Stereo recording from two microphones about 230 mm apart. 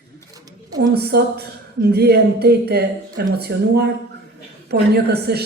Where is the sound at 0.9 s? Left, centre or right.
Right.